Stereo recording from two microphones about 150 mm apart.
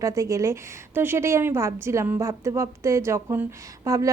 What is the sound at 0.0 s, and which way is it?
A woman's voice, 20° right (ahead or behind).